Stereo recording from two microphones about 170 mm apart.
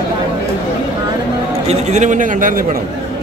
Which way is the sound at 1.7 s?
45° right (ahead or behind).